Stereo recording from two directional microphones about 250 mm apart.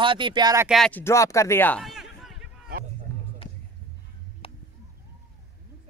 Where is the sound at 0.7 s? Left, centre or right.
Centre.